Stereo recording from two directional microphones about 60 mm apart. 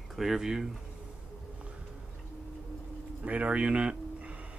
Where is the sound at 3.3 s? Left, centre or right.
Right.